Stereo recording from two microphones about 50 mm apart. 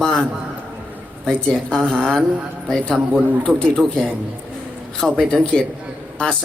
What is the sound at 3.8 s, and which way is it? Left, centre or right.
Speech, centre.